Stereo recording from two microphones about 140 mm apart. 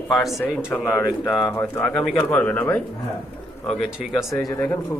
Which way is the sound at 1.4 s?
20° left (ahead or behind).